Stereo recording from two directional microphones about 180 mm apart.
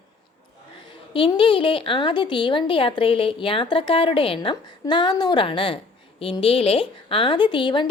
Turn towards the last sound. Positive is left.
turn(degrees=25)  # may be behind; listen again after turning